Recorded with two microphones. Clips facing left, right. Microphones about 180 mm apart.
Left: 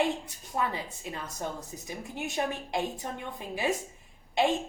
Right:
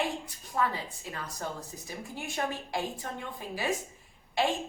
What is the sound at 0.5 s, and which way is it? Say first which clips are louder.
A woman's voice: right 1 dB; 20° left (ahead or behind).